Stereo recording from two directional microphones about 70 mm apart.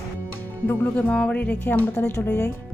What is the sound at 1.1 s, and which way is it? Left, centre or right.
Speech, centre.